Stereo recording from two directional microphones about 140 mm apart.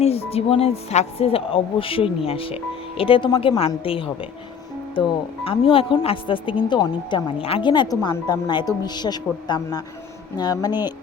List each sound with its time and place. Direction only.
0.0 s a woman's voice: 45° left (ahead or behind); by 10.8 s 30° left (ahead or behind)